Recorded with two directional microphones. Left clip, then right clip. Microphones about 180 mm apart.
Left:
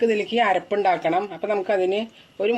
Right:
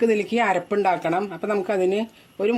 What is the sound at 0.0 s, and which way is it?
Speech, 50° right (ahead or behind).